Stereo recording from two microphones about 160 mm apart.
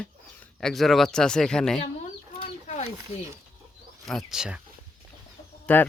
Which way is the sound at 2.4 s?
40° left (ahead or behind).